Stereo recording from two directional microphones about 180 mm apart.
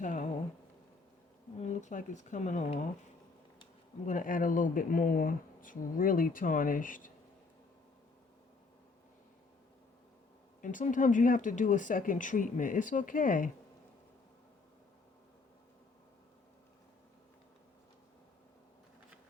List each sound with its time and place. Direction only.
0.0 s a sound: 45° left (ahead or behind)
1.5 s speech: 40° left (ahead or behind)
4.0 s speech: 45° left (ahead or behind)
10.6 s speech: 45° left (ahead or behind)